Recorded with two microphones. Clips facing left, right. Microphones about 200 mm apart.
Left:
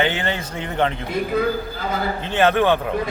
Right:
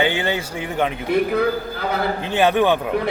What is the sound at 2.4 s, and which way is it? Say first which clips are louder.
Speech: even; 15° right (ahead or behind).